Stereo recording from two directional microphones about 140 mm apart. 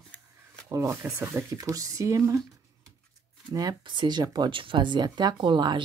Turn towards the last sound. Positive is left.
turn(degrees=-35)  # may be behind; listen again after turning